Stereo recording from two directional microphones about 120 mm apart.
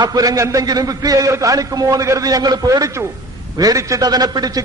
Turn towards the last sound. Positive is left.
turn(degrees=-30)  # may be behind; listen again after turning